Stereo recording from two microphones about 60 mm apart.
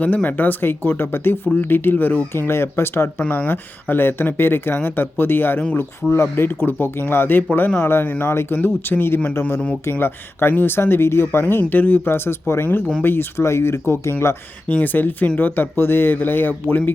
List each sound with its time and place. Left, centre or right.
0.0 s speech: left
2.5 s speech: left
3.2 s speech: left
5.7 s speech: left
14.7 s speech: left